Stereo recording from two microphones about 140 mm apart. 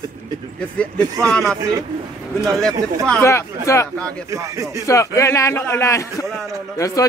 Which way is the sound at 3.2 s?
20° left (ahead or behind).